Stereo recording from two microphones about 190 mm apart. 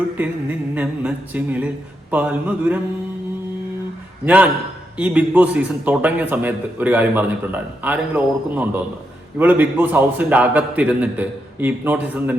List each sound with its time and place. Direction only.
0.8 s a man's voice: 10° right (ahead or behind)
4.9 s a man's voice: 5° right (ahead or behind)